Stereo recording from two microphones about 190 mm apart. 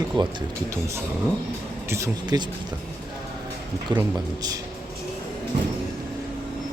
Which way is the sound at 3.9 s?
25° right (ahead or behind).